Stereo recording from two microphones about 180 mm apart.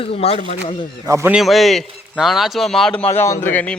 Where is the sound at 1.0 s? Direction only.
15° right (ahead or behind).